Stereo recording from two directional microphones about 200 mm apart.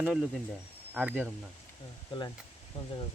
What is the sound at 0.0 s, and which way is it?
Speech, 5° right (ahead or behind).